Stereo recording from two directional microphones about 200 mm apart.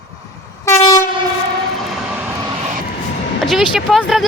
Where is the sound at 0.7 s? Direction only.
15° left (ahead or behind).